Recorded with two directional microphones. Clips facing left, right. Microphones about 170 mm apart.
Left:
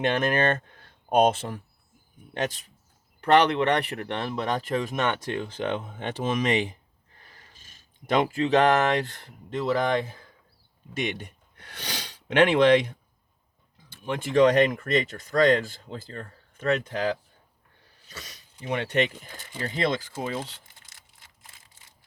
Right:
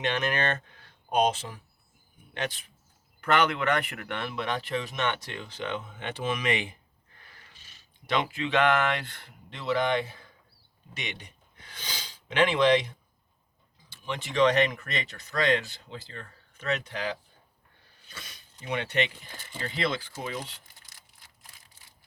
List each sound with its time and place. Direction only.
0.0 s speech: 50° left (ahead or behind)
2.3 s speech: 40° left (ahead or behind)
20.7 s a sound: 25° left (ahead or behind)